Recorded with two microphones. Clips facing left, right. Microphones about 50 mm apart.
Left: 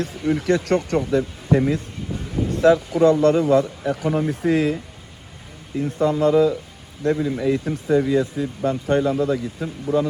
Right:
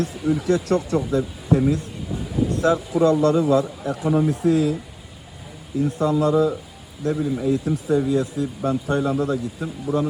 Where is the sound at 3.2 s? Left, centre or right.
Left.